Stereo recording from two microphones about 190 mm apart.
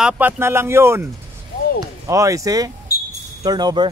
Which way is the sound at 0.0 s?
10° right (ahead or behind).